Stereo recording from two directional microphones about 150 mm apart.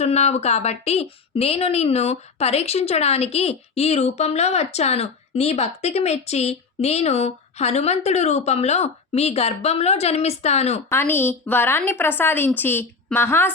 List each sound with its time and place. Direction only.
0.0 s a woman's voice: 45° left (ahead or behind)
10.8 s a woman's voice: 15° left (ahead or behind)